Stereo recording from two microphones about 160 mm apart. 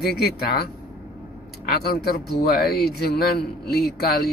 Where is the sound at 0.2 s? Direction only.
85° left.